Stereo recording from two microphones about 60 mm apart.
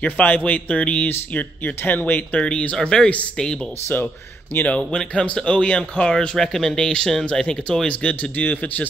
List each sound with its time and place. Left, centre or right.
0.0 s speech: left
2.3 s speech: centre
3.9 s speech: left
4.6 s speech: centre